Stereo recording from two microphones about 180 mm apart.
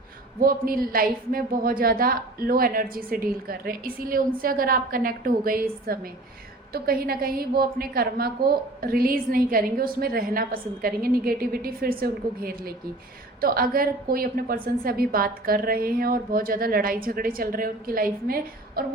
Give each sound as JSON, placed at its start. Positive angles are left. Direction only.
{"t": 0.3, "sound": "a woman's voice", "side_deg": -55}